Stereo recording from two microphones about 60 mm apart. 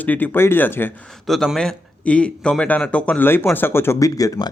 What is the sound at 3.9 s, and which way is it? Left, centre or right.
Speech, left.